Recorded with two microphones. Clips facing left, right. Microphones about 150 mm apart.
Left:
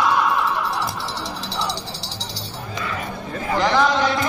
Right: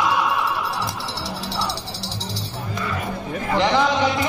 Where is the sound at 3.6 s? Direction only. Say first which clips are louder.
Even; 20° right (ahead or behind).